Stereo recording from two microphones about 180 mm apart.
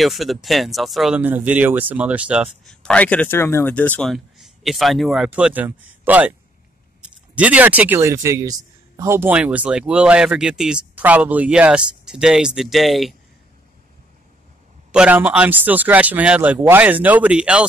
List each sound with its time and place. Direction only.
0.0 s speech: centre (ahead or behind)
14.9 s speech: 5° right (ahead or behind)